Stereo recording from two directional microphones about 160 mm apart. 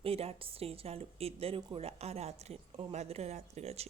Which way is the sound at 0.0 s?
40° right (ahead or behind).